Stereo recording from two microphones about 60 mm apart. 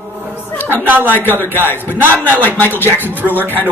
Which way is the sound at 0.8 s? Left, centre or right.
Right.